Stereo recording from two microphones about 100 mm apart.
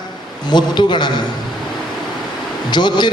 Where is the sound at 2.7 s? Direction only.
50° left (ahead or behind).